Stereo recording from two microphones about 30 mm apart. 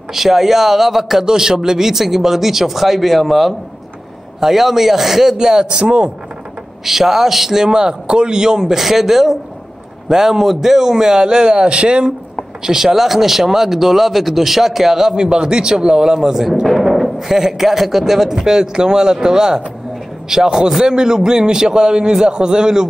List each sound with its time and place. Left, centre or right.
0.1 s speech: centre
1.2 s speech: right
6.8 s speech: centre
8.6 s a man's voice: centre; by 12.1 s right
12.6 s a man's voice: centre
16.9 s a man's voice: centre; by 22.8 s right